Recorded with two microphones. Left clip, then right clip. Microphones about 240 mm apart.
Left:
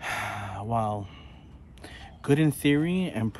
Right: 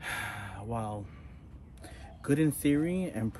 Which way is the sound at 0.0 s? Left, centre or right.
Left.